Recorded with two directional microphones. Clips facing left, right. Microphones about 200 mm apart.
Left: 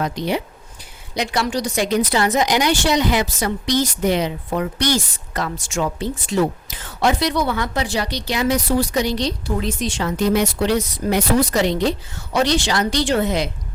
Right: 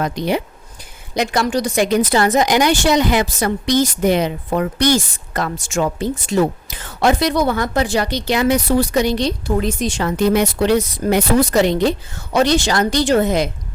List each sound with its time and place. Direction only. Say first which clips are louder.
0.0 s speech: right 3 dB; 50° right (ahead or behind)